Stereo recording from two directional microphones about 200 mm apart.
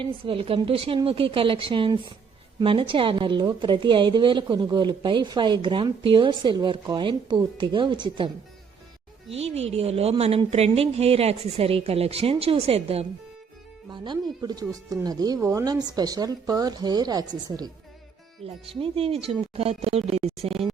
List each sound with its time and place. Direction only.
0.0 s a woman's voice: 25° right (ahead or behind)
9.3 s a woman's voice: 30° right (ahead or behind)